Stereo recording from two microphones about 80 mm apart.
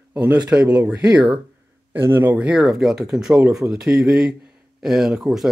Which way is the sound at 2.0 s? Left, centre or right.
Right.